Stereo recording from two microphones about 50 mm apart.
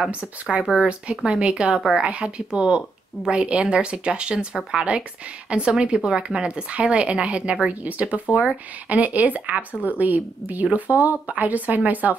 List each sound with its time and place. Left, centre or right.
0.1 s a woman's voice: right